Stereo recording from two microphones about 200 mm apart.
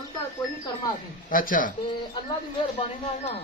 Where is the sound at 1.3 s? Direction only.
45° left (ahead or behind).